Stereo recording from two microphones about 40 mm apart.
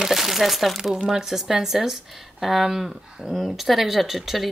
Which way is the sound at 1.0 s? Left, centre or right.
Centre.